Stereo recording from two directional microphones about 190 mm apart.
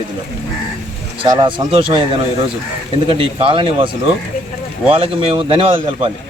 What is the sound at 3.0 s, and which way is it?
Speech, 25° right (ahead or behind).